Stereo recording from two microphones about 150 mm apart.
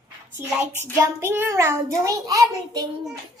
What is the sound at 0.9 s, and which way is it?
A child's voice, 15° right (ahead or behind).